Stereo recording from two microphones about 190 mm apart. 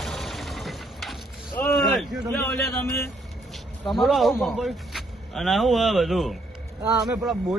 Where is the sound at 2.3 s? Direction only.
Centre (ahead or behind).